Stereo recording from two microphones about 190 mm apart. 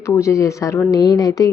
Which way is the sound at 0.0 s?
15° left (ahead or behind).